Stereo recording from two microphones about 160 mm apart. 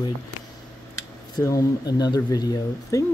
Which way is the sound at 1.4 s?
20° left (ahead or behind).